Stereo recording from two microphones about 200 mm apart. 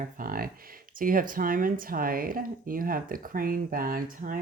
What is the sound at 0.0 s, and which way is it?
Speech, 45° right (ahead or behind).